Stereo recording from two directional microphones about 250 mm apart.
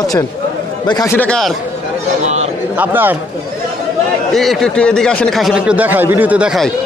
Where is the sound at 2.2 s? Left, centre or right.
Right.